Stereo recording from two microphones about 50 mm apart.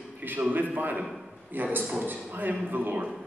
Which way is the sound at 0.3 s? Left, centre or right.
Right.